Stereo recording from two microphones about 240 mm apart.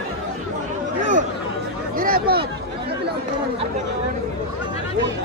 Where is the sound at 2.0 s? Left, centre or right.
Right.